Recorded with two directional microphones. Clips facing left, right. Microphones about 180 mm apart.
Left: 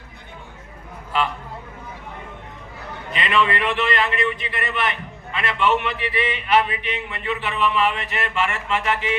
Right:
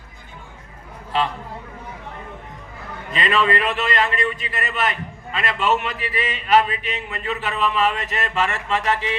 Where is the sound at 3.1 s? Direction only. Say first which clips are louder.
Right 1 dB; 40° right (ahead or behind).